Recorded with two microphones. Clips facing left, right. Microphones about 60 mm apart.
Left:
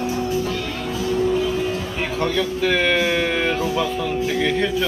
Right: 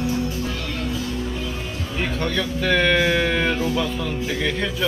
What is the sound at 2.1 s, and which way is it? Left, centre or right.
Speech, centre.